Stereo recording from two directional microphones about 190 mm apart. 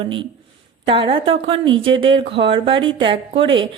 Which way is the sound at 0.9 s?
25° right (ahead or behind).